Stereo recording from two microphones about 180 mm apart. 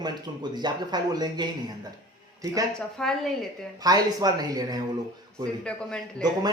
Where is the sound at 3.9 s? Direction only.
20° right (ahead or behind).